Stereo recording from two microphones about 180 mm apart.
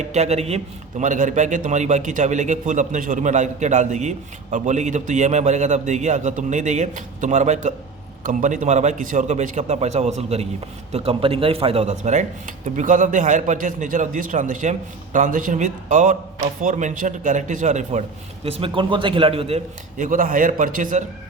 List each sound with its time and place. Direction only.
0.0 s a man's voice: 40° right (ahead or behind)